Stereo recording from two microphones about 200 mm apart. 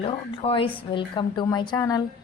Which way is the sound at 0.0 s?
30° left (ahead or behind).